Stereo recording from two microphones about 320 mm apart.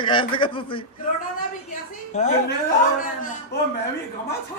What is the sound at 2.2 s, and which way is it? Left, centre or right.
Speech, left.